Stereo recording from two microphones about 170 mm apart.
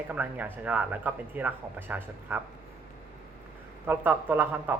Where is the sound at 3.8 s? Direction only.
10° right (ahead or behind).